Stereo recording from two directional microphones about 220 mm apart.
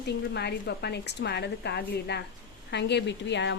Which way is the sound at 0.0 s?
50° left (ahead or behind).